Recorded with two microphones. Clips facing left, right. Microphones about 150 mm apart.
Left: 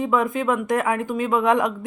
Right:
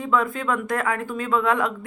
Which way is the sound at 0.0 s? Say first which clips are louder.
Left 2 dB; 20° left (ahead or behind).